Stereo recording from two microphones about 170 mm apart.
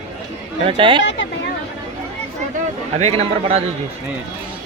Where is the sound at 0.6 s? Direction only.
30° right (ahead or behind).